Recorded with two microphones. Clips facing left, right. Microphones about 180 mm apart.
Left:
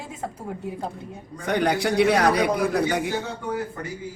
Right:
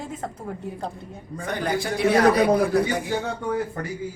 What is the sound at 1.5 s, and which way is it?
Speech, 65° left (ahead or behind).